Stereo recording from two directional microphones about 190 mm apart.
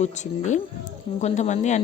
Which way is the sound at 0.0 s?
40° left (ahead or behind).